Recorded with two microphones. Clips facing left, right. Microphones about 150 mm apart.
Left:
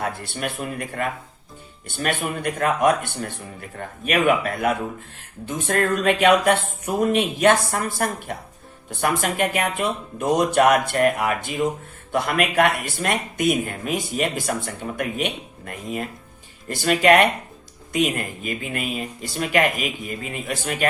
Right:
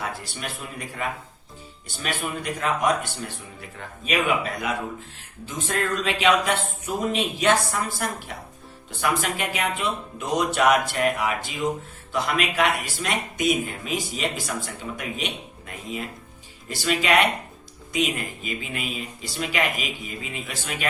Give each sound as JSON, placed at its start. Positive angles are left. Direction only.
{"t": 0.0, "sound": "speech", "side_deg": 55}